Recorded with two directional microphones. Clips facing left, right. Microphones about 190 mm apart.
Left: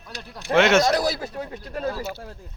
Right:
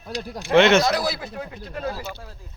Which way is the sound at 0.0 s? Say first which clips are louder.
Right 8 dB; 40° right (ahead or behind).